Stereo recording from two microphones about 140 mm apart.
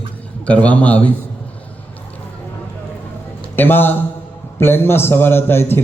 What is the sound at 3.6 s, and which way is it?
A man's voice, 15° left (ahead or behind).